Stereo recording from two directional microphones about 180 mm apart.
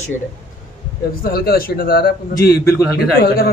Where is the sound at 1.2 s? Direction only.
55° left (ahead or behind).